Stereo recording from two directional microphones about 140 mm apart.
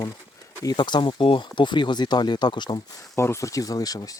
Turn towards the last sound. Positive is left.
turn(degrees=25)  # may be behind; listen again after turning